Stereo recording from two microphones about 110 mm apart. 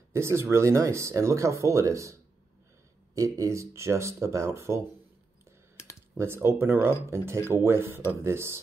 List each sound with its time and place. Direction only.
0.1 s speech: 25° right (ahead or behind)
3.3 s speech: 30° right (ahead or behind)
6.1 s speech: 25° right (ahead or behind)